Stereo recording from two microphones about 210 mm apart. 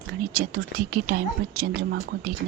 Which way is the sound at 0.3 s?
45° right (ahead or behind).